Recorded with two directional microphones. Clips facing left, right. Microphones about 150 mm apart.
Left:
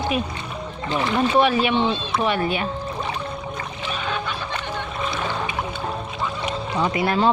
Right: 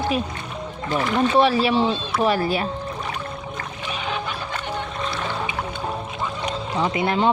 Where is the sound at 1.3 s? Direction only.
30° right (ahead or behind).